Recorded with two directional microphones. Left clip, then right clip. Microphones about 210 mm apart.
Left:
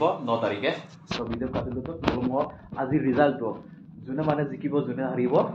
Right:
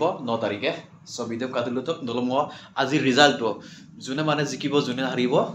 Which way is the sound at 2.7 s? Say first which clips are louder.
Right 5 dB; 35° right (ahead or behind).